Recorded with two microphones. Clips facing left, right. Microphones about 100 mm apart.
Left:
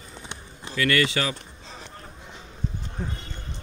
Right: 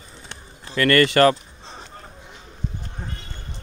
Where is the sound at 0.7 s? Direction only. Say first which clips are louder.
Right 7 dB; 50° right (ahead or behind).